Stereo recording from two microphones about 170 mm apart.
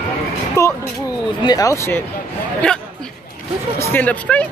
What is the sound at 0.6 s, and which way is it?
Speech, 15° left (ahead or behind).